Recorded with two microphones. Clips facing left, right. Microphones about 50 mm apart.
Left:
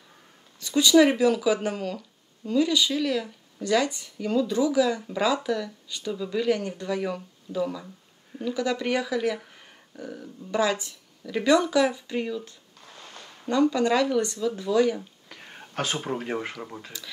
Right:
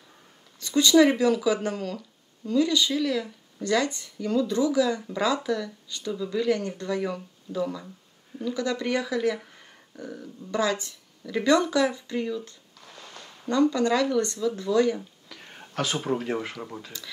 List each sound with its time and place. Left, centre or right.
0.6 s speech: centre
11.2 s speech: centre
12.8 s a sound: left
13.4 s speech: centre
15.4 s a sound: centre
15.7 s speech: left
16.2 s speech: centre
16.5 s speech: centre